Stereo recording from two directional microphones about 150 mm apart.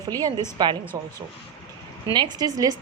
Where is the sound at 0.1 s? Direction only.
25° right (ahead or behind).